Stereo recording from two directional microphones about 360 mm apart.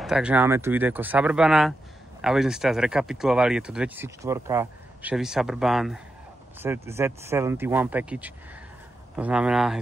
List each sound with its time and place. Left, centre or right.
0.0 s speech: centre